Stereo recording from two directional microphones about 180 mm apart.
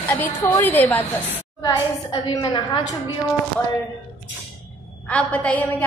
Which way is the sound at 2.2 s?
25° left (ahead or behind).